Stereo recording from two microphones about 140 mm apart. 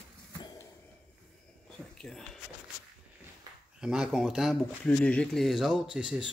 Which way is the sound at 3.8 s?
5° right (ahead or behind).